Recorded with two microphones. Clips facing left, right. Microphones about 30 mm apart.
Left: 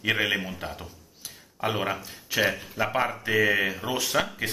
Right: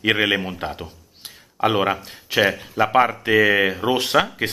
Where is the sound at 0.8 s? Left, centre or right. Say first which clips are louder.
Right 4 dB; right.